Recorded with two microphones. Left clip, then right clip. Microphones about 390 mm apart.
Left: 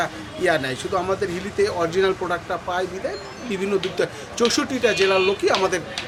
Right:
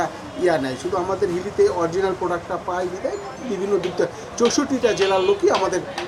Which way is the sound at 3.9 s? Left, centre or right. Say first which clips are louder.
Right 1 dB; left.